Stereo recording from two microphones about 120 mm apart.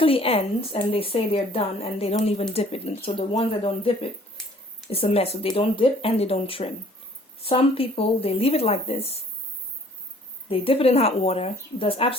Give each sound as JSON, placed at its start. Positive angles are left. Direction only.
{"t": 0.0, "sound": "speech", "side_deg": 50}
{"t": 10.5, "sound": "speech", "side_deg": 50}